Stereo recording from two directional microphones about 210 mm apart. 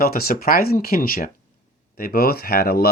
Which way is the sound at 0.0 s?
45° left (ahead or behind).